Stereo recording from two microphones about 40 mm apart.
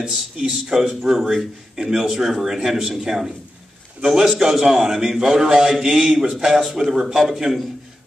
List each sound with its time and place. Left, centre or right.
0.1 s a man's voice: centre